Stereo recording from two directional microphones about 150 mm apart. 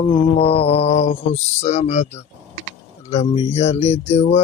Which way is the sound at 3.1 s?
45° left (ahead or behind).